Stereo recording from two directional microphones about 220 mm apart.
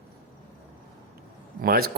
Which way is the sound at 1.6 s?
45° right (ahead or behind).